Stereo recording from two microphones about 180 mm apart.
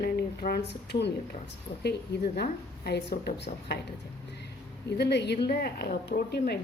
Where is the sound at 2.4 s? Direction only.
65° left (ahead or behind).